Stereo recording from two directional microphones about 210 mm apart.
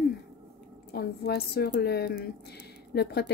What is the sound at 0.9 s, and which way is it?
A woman's voice, 50° left (ahead or behind).